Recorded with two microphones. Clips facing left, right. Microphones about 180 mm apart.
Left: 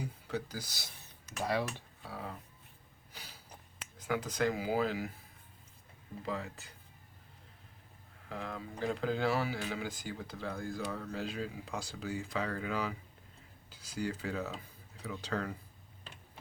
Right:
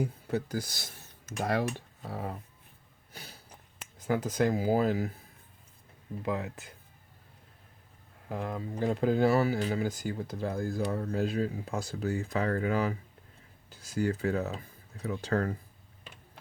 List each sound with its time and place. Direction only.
0.0 s speech: 50° right (ahead or behind)
4.0 s speech: 45° right (ahead or behind)
6.2 s speech: 60° right (ahead or behind)
8.3 s speech: 50° right (ahead or behind)